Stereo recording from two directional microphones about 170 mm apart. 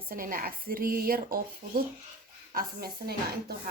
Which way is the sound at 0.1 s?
55° right (ahead or behind).